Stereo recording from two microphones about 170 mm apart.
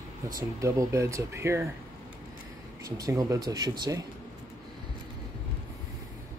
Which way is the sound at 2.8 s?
20° right (ahead or behind).